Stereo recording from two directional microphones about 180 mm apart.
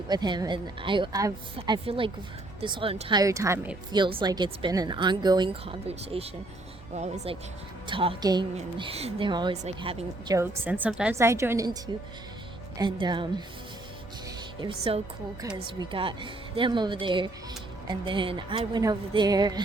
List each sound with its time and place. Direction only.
0.1 s speech: 25° right (ahead or behind)
3.2 s a woman's voice: 15° right (ahead or behind)
3.9 s speech: 25° right (ahead or behind)
7.9 s speech: 30° right (ahead or behind)
8.5 s speech: 35° right (ahead or behind)
10.3 s a woman's voice: 10° right (ahead or behind)
12.8 s speech: 25° right (ahead or behind)
14.6 s speech: 30° right (ahead or behind)